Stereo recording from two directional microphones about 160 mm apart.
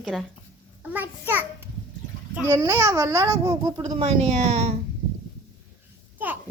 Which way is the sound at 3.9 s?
45° right (ahead or behind).